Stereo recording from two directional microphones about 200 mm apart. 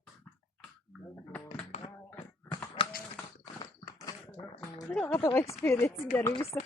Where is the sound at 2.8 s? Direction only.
25° left (ahead or behind).